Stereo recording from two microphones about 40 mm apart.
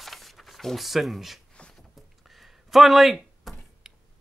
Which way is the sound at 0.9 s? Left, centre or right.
Centre.